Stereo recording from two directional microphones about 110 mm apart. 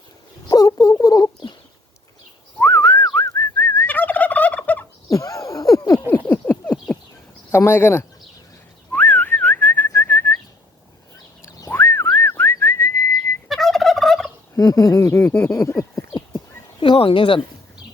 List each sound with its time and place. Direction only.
0.4 s a sound: 35° left (ahead or behind)
2.6 s gobble: 20° left (ahead or behind)
5.1 s a sound: 30° left (ahead or behind)
6.1 s a sound: 20° left (ahead or behind)
7.5 s speech: 20° left (ahead or behind)
8.9 s whistling: 15° left (ahead or behind)
11.4 s whistling: 20° left (ahead or behind)
13.5 s fowl: centre (ahead or behind)
14.5 s speech: 35° left (ahead or behind)
16.8 s speech: 50° left (ahead or behind)